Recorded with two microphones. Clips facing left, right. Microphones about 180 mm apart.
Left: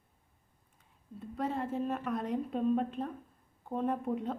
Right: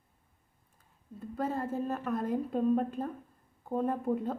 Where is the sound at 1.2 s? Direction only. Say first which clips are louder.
Right 1 dB; centre (ahead or behind).